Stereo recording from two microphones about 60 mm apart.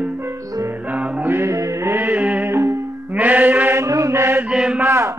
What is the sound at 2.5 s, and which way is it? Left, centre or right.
Music, right.